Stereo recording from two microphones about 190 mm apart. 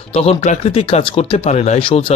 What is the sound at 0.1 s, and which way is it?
Speech, 30° left (ahead or behind).